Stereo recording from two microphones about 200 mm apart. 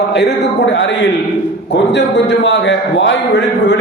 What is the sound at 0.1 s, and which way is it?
A man's voice, 60° left (ahead or behind).